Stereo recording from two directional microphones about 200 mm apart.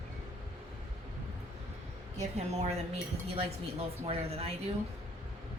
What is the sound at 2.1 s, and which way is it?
Speech, 35° right (ahead or behind).